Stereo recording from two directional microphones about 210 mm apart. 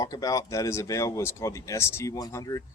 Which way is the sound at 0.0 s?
15° left (ahead or behind).